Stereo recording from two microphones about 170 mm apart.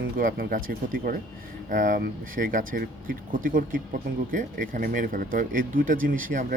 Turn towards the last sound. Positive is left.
turn(degrees=-55)  # may be behind; listen again after turning